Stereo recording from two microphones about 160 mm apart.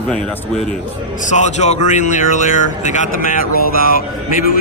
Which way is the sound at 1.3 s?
45° left (ahead or behind).